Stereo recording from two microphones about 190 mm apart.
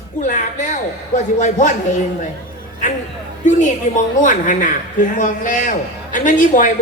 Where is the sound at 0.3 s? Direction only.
40° left (ahead or behind).